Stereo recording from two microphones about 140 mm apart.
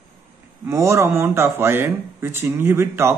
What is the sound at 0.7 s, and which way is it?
Speech, 20° right (ahead or behind).